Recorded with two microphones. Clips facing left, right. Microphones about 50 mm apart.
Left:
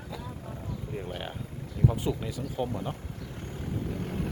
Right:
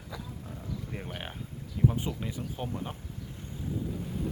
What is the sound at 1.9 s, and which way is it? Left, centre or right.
Speech, right.